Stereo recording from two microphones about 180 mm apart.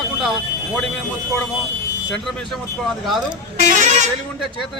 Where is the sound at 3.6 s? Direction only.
45° right (ahead or behind).